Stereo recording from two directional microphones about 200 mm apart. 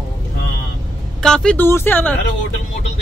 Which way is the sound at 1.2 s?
5° left (ahead or behind).